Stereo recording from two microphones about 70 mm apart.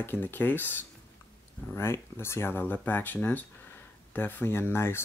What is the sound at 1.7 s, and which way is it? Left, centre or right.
Speech, left.